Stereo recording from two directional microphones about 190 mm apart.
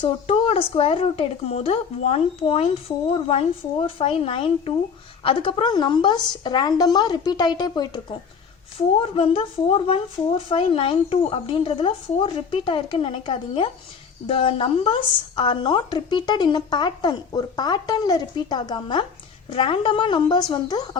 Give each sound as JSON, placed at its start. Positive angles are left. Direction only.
{"t": 0.0, "sound": "a woman's voice", "side_deg": 30}